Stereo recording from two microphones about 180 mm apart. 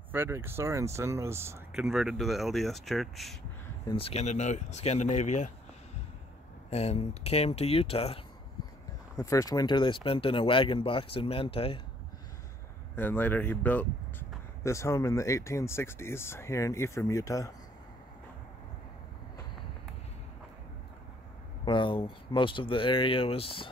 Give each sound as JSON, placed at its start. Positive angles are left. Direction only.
{"t": 0.1, "sound": "speech", "side_deg": -10}
{"t": 1.7, "sound": "speech", "side_deg": 0}
{"t": 3.8, "sound": "speech", "side_deg": 30}
{"t": 6.7, "sound": "speech", "side_deg": 35}
{"t": 9.2, "sound": "speech", "side_deg": 20}
{"t": 12.9, "sound": "speech", "side_deg": 10}
{"t": 21.6, "sound": "speech", "side_deg": 25}